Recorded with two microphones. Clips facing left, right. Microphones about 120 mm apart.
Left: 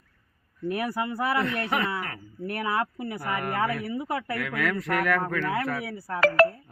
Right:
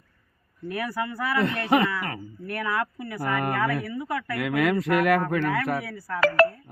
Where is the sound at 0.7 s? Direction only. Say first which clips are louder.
Left 1 dB; 25° left (ahead or behind).